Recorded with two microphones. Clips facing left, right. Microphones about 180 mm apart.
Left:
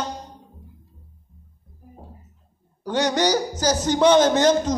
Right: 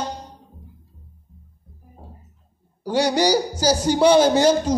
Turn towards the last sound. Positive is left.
turn(degrees=-10)  # may be behind; listen again after turning